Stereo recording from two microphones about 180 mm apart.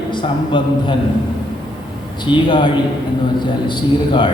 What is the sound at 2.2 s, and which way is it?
A man's voice, 25° left (ahead or behind).